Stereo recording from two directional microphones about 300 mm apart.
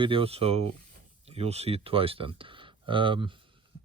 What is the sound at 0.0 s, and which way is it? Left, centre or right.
Speech, centre.